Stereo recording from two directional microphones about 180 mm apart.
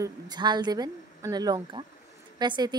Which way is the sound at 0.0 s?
25° right (ahead or behind).